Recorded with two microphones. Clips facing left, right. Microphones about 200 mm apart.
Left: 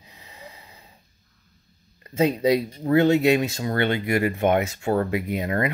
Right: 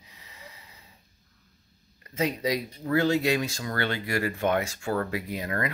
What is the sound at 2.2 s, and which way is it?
Speech, 30° left (ahead or behind).